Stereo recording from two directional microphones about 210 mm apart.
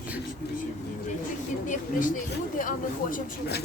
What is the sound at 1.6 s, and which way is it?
A woman's voice, 40° left (ahead or behind).